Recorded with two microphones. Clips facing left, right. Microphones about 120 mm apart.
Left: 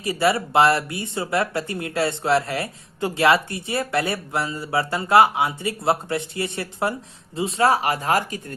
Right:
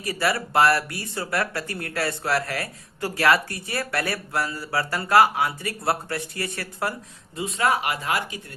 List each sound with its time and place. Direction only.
0.0 s speech: 25° left (ahead or behind); by 8.5 s 40° left (ahead or behind)